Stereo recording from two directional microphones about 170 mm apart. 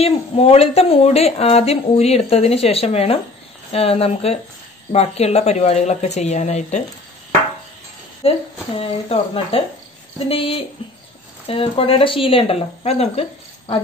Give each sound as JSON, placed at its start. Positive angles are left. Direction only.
{"t": 0.0, "sound": "a woman's voice", "side_deg": 35}
{"t": 8.2, "sound": "a woman's voice", "side_deg": 35}